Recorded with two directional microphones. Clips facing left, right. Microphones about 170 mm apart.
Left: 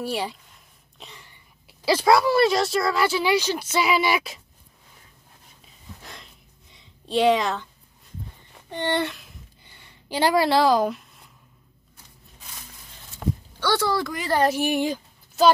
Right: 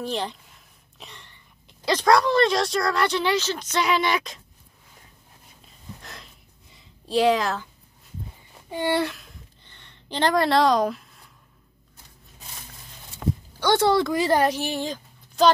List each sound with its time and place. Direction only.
0.0 s speech: 10° left (ahead or behind)
5.6 s a sound: centre (ahead or behind)
8.6 s speech: 5° right (ahead or behind)
9.6 s a sound: 10° left (ahead or behind)
13.6 s speech: 20° right (ahead or behind)
14.4 s a woman's voice: 10° left (ahead or behind)